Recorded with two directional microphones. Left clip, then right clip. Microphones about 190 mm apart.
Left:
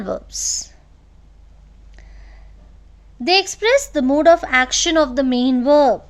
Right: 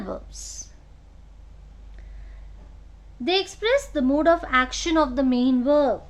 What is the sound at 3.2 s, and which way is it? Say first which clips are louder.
A woman's voice: left 7 dB; 40° left (ahead or behind).